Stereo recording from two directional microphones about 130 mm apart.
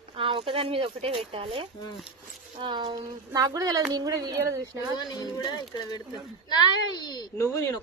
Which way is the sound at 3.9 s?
30° right (ahead or behind).